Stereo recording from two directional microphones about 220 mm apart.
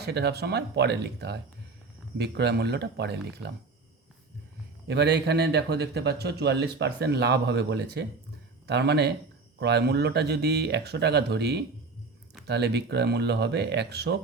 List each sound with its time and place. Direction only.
0.0 s a man's voice: 50° right (ahead or behind)
4.9 s a man's voice: 50° right (ahead or behind)